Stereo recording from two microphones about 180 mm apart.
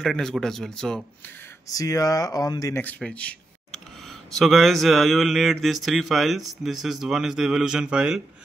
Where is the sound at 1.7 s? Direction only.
20° left (ahead or behind); by 8.2 s 5° right (ahead or behind).